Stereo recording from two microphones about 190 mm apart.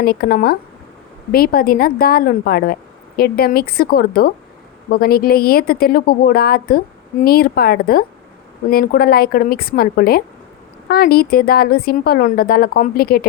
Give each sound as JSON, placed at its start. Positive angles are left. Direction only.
{"t": 0.0, "sound": "a woman's voice", "side_deg": 50}